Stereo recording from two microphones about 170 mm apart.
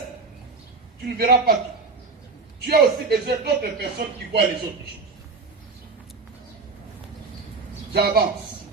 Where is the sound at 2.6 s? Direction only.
65° right (ahead or behind).